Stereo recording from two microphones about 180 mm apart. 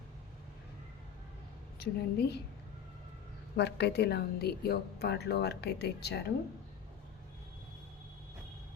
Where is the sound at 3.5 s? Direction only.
70° left (ahead or behind).